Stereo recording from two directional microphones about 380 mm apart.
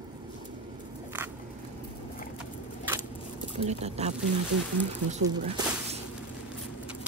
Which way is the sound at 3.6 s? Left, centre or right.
Centre.